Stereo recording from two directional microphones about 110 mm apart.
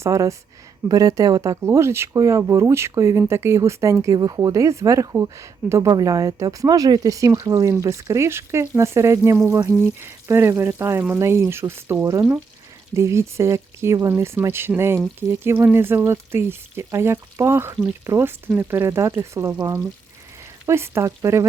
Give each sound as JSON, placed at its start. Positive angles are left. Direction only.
{"t": 0.0, "sound": "speech", "side_deg": -30}
{"t": 4.1, "sound": "speech", "side_deg": -35}
{"t": 20.7, "sound": "speech", "side_deg": -25}